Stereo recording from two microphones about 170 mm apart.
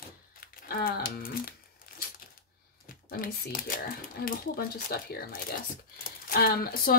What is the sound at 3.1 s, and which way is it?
Speech, 60° left (ahead or behind).